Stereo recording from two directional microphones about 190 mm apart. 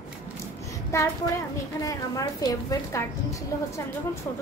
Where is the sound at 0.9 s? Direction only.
15° left (ahead or behind).